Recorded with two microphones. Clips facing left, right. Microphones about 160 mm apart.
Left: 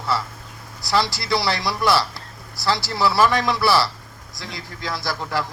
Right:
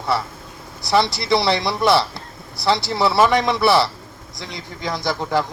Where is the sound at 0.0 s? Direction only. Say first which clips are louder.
Right 3 dB; 20° right (ahead or behind).